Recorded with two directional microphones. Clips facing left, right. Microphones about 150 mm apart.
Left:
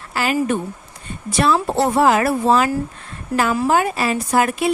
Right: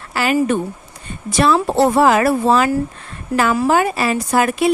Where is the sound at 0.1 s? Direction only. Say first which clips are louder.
Right 3 dB; 70° right (ahead or behind).